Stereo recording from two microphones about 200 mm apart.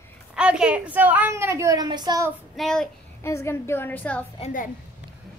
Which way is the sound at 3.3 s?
15° left (ahead or behind).